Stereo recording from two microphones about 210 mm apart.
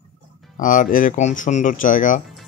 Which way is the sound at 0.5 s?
40° left (ahead or behind).